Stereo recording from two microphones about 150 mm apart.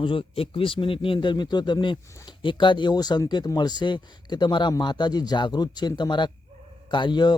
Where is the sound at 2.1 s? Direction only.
20° left (ahead or behind).